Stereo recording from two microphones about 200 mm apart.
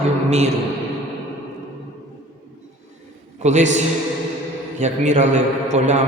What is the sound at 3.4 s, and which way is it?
Speech, 35° right (ahead or behind).